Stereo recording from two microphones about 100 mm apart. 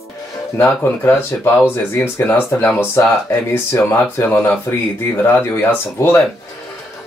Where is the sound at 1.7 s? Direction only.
20° left (ahead or behind).